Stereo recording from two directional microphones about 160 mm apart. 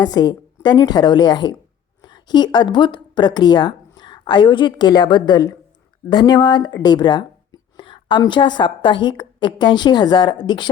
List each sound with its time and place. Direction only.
0.0 s speech: 25° left (ahead or behind)